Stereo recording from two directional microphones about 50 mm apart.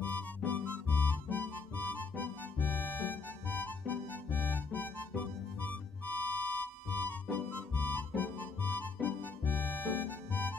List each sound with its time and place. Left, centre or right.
0.5 s music: left